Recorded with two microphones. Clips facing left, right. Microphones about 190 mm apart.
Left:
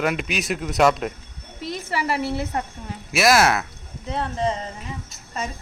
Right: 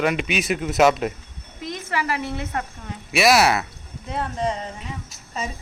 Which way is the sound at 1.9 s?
35° left (ahead or behind).